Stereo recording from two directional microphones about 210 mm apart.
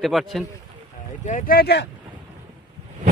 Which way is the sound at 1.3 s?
40° left (ahead or behind).